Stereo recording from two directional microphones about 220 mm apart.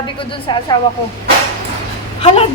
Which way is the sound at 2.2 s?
25° left (ahead or behind).